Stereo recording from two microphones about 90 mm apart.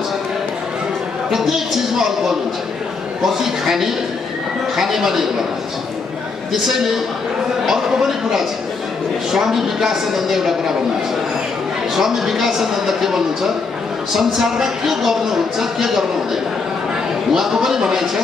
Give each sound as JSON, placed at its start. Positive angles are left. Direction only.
{"t": 1.3, "sound": "speech", "side_deg": -5}
{"t": 6.5, "sound": "speech", "side_deg": -5}
{"t": 11.9, "sound": "speech", "side_deg": -5}
{"t": 17.3, "sound": "speech", "side_deg": -5}